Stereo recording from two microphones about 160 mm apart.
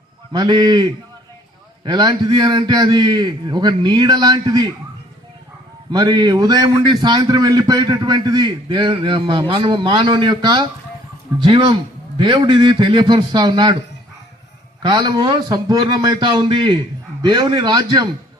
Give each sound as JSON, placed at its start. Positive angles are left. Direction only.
{"t": 0.3, "sound": "a man's voice", "side_deg": -25}
{"t": 5.9, "sound": "a man's voice", "side_deg": -25}
{"t": 14.8, "sound": "a man's voice", "side_deg": -30}